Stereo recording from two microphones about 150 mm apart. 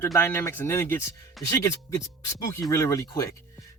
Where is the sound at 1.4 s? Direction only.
Centre (ahead or behind).